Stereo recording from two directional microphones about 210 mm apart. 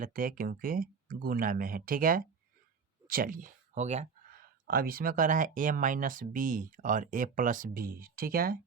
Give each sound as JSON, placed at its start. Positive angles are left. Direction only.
{"t": 0.0, "sound": "speech", "side_deg": -40}
{"t": 3.1, "sound": "a sound", "side_deg": -40}
{"t": 4.4, "sound": "speech", "side_deg": -45}